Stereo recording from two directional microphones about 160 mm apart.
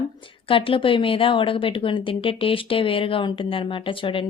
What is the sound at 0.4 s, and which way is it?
Speech, 35° left (ahead or behind).